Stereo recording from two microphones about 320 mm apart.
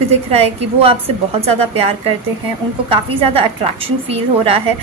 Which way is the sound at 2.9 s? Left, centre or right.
Centre.